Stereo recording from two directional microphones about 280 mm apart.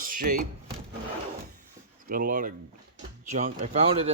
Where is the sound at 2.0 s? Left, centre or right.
Right.